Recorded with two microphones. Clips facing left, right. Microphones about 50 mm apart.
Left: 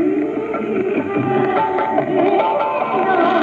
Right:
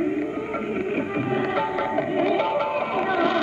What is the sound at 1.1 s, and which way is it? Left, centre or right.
Music, left.